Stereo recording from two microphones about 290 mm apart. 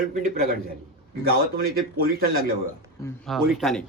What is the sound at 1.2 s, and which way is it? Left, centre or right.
A man's voice, right.